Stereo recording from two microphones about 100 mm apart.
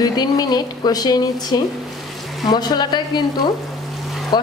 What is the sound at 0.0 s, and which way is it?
A woman's voice, 45° left (ahead or behind).